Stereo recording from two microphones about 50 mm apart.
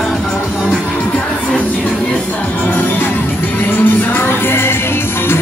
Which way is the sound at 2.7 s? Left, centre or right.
Left.